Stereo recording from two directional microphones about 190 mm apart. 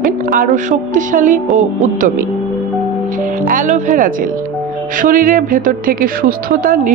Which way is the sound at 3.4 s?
40° right (ahead or behind).